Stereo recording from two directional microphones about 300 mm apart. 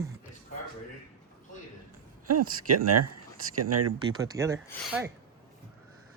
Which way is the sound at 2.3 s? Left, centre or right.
Right.